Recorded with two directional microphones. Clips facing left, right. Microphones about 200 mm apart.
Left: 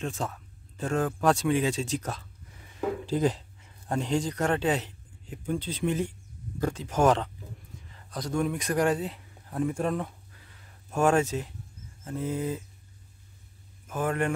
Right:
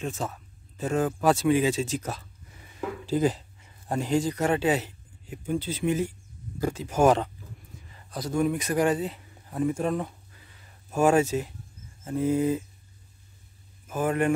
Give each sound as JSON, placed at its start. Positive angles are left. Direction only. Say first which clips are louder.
{"t": 0.1, "sound": "a man's voice", "louder": "right 1 dB", "side_deg": -5}
{"t": 13.8, "sound": "speech", "louder": "right 3 dB", "side_deg": -5}